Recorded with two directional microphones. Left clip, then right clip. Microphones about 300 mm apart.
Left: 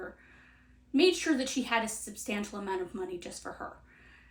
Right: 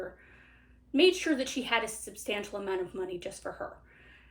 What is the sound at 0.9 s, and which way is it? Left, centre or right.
A woman's voice, left.